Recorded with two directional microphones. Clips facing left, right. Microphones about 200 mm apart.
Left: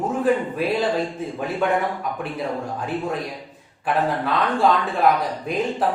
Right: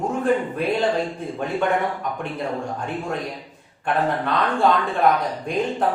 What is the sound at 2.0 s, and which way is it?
A man's voice, 5° left (ahead or behind).